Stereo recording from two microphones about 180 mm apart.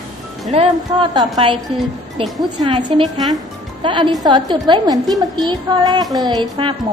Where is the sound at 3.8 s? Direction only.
25° right (ahead or behind).